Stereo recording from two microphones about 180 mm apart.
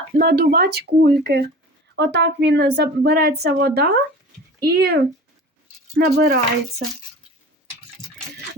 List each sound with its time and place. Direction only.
0.2 s speech: 60° right (ahead or behind)
6.0 s speech: 55° right (ahead or behind)